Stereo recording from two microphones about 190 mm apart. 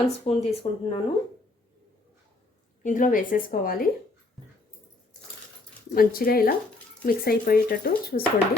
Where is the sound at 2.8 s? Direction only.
45° left (ahead or behind).